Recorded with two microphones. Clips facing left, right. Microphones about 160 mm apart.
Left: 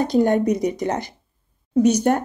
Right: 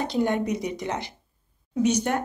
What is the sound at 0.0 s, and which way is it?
A woman's voice, 45° left (ahead or behind).